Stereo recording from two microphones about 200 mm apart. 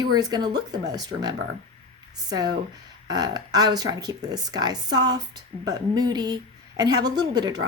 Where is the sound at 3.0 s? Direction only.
20° right (ahead or behind).